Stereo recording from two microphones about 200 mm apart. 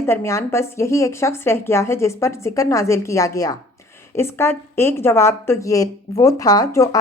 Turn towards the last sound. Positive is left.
turn(degrees=15)  # may be behind; listen again after turning